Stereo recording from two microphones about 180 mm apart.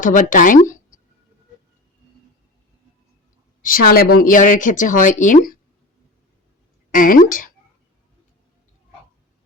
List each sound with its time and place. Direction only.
0.0 s speech: 45° left (ahead or behind)
3.6 s speech: 50° left (ahead or behind)
6.9 s speech: 50° left (ahead or behind)